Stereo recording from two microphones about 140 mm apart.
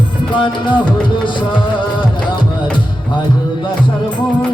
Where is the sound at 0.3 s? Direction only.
35° left (ahead or behind).